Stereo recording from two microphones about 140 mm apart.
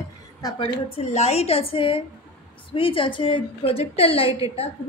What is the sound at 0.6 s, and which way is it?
A woman's voice, 45° left (ahead or behind).